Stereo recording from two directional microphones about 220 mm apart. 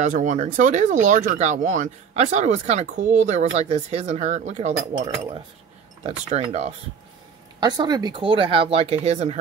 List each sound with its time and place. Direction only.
0.0 s speech: 35° right (ahead or behind)
7.6 s speech: 20° right (ahead or behind)